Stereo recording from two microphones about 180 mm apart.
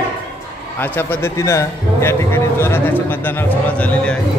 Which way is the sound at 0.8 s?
10° left (ahead or behind).